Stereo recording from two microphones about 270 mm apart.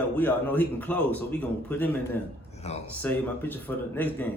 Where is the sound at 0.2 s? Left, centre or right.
Centre.